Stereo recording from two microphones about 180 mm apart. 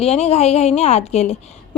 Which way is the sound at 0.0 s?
35° left (ahead or behind).